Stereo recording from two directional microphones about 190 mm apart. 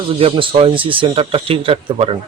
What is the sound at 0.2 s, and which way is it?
Speech, 30° right (ahead or behind).